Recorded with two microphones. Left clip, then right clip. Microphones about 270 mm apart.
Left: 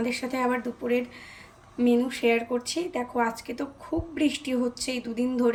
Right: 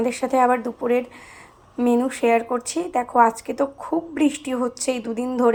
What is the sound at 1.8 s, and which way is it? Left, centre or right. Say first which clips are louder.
Speech: right 4 dB; right.